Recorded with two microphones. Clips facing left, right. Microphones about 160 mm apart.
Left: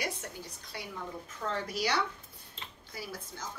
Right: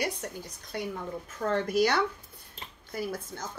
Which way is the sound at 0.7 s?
45° right (ahead or behind).